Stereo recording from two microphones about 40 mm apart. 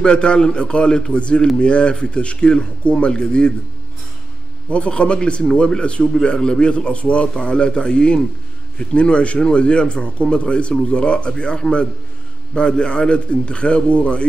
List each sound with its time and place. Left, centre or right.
0.0 s speech: left
4.6 s speech: left